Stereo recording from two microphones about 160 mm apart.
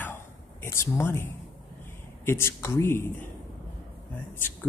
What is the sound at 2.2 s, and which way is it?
Speech, 15° left (ahead or behind).